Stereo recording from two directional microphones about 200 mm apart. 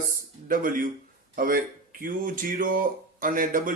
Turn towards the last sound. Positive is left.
turn(degrees=-40)  # may be behind; listen again after turning